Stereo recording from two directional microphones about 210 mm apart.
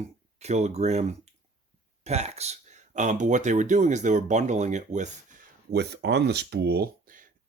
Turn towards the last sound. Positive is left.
turn(degrees=-45)  # may be behind; listen again after turning